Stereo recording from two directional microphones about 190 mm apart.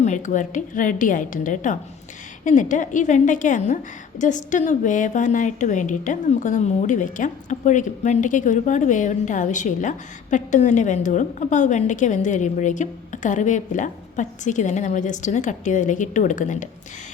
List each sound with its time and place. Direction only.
0.0 s a woman's voice: 40° left (ahead or behind)